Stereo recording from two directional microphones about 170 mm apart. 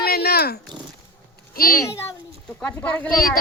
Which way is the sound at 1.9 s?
15° left (ahead or behind).